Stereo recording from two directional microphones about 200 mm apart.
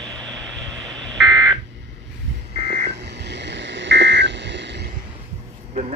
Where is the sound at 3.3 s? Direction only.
60° right (ahead or behind).